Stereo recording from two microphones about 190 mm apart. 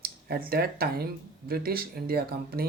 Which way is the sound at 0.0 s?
50° right (ahead or behind).